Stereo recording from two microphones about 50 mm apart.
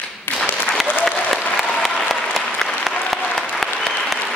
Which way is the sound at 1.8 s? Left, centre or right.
Centre.